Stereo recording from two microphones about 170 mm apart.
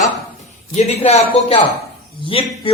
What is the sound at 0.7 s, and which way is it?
A woman's voice, 40° left (ahead or behind).